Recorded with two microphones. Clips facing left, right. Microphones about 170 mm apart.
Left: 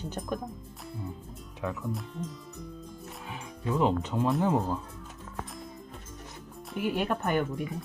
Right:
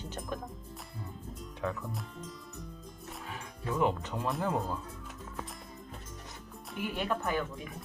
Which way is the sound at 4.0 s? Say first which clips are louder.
Left 7 dB; 20° left (ahead or behind).